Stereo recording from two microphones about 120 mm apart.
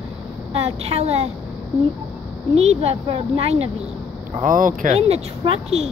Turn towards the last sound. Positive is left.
turn(degrees=-55)  # may be behind; listen again after turning